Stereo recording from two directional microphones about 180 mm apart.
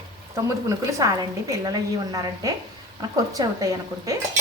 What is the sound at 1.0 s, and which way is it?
A woman's voice, 20° right (ahead or behind).